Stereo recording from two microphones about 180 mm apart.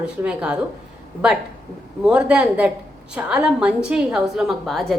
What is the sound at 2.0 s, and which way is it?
A woman's voice, 5° right (ahead or behind).